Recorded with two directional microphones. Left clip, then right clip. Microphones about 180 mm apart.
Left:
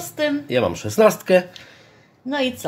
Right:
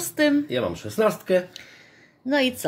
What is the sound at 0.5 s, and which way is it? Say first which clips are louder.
Speech: left 6 dB; 35° left (ahead or behind).